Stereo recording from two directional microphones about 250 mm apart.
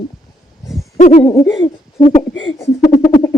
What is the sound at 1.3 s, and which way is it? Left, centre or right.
Speech, centre.